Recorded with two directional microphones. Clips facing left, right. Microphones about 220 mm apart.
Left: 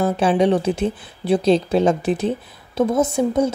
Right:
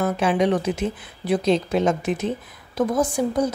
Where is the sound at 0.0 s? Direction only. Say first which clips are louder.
Left 3 dB; 30° left (ahead or behind).